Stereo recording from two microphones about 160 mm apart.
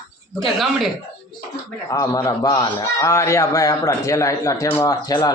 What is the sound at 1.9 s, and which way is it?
A man's voice, 20° left (ahead or behind).